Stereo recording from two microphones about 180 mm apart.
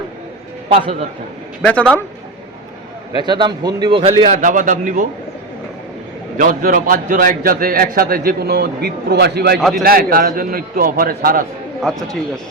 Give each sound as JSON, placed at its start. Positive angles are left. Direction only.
{"t": 0.7, "sound": "a man's voice", "side_deg": -30}
{"t": 1.6, "sound": "speech", "side_deg": 10}
{"t": 3.2, "sound": "a man's voice", "side_deg": -25}
{"t": 4.3, "sound": "a man's voice", "side_deg": -45}
{"t": 6.3, "sound": "a man's voice", "side_deg": -50}
{"t": 9.6, "sound": "a man's voice", "side_deg": 0}
{"t": 9.8, "sound": "a man's voice", "side_deg": -55}
{"t": 11.8, "sound": "a man's voice", "side_deg": 0}